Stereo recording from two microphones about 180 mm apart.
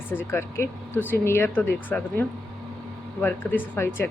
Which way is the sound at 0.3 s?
15° left (ahead or behind).